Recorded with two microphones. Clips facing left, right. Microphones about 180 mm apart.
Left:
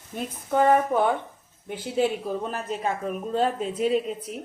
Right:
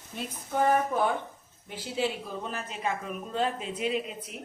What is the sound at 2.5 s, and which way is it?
A woman's voice, 40° left (ahead or behind).